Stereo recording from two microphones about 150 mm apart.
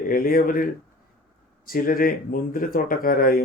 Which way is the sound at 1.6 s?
70° left (ahead or behind).